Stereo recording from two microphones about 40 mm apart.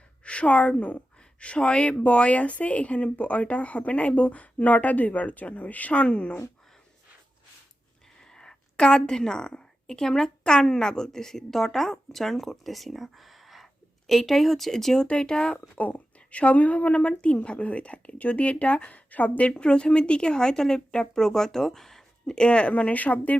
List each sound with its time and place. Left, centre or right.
0.3 s a woman's voice: left
8.2 s a woman's voice: centre
15.0 s speech: left
15.8 s a woman's voice: left
19.5 s speech: left; by 22.4 s centre
22.4 s speech: left
22.7 s a woman's voice: left